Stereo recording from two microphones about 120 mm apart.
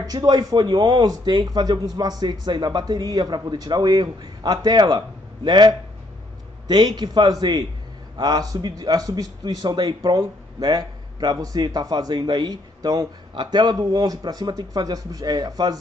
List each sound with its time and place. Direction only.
0.0 s a man's voice: 35° right (ahead or behind)